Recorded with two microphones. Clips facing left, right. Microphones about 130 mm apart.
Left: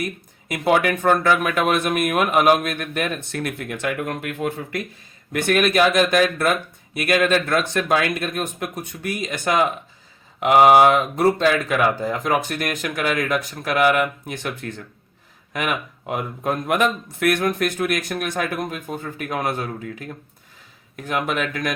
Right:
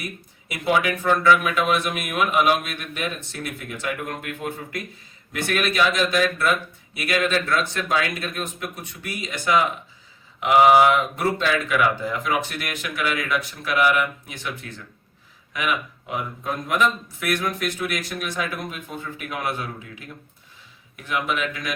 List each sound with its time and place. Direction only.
0.4 s speech: 50° left (ahead or behind)
5.3 s speech: 50° left (ahead or behind)
15.5 s speech: 50° left (ahead or behind)